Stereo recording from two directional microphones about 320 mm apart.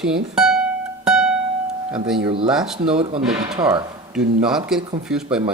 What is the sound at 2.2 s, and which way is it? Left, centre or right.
Speech, centre.